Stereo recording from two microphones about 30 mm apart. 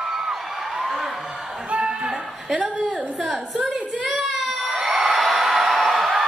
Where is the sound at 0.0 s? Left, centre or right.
Centre.